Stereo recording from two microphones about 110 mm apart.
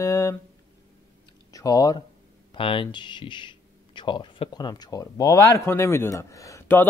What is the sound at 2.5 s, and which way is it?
Speech, 50° left (ahead or behind).